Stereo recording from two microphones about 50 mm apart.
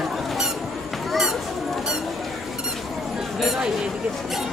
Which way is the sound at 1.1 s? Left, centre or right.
Centre.